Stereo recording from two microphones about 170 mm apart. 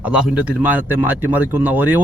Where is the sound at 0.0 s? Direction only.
5° right (ahead or behind).